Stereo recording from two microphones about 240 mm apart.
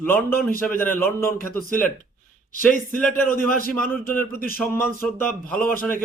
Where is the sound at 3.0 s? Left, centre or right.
Centre.